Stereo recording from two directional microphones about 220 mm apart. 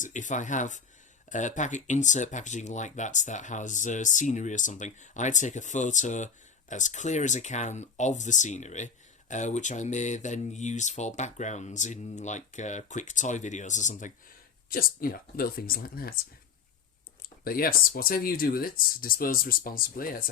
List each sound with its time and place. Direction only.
0.0 s speech: 35° left (ahead or behind)
17.2 s speech: 40° left (ahead or behind)